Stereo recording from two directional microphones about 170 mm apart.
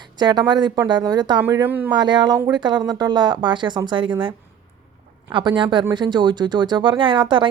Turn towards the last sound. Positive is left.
turn(degrees=-30)  # may be behind; listen again after turning